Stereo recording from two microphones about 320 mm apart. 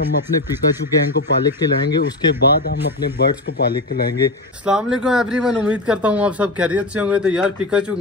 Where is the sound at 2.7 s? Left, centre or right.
Left.